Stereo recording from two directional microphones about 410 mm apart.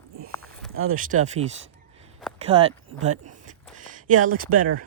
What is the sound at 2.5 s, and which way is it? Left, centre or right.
Speech, centre.